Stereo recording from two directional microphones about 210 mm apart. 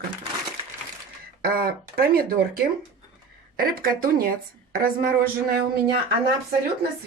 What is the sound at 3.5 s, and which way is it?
Speech, 45° right (ahead or behind).